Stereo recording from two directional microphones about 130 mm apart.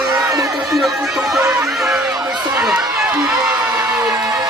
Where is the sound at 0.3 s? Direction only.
25° right (ahead or behind).